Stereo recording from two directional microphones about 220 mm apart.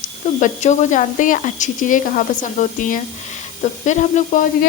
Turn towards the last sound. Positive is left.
turn(degrees=35)  # may be behind; listen again after turning